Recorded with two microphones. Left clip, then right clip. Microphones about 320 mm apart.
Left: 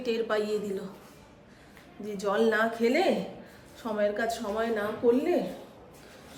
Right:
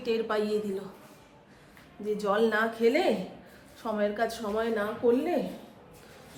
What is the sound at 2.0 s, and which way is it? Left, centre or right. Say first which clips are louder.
Speech: even; centre.